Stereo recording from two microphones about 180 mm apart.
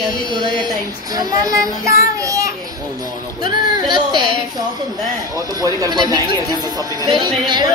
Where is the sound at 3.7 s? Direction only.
25° right (ahead or behind).